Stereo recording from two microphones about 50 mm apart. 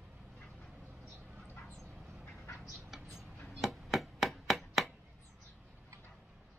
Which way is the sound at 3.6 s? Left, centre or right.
Centre.